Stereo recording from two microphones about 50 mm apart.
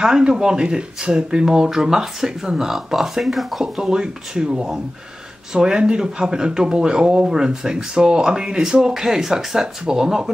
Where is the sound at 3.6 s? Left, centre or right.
Centre.